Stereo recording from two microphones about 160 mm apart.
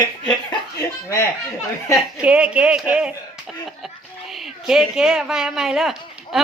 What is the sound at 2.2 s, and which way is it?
Speech, 5° right (ahead or behind).